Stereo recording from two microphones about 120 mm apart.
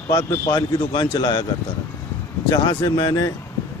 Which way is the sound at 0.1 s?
35° left (ahead or behind).